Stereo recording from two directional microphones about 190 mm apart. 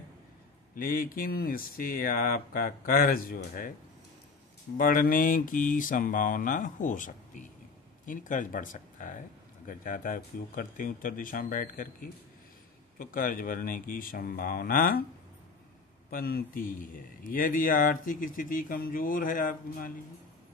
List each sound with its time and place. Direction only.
0.7 s a man's voice: 50° left (ahead or behind)
4.7 s a man's voice: 45° left (ahead or behind)
16.1 s a man's voice: 50° left (ahead or behind)